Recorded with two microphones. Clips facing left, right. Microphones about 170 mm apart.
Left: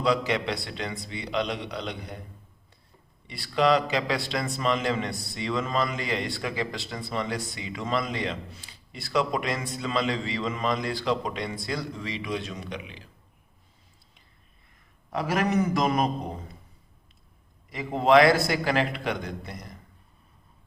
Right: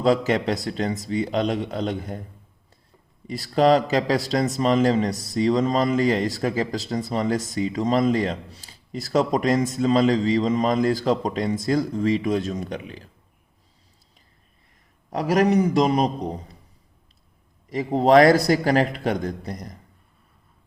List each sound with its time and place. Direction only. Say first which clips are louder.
0.0 s speech: right 5 dB; 45° right (ahead or behind)
3.2 s a man's voice: right 5 dB; 40° right (ahead or behind)
15.1 s a man's voice: right 6 dB; 35° right (ahead or behind)
17.7 s a man's voice: right 4 dB; 40° right (ahead or behind)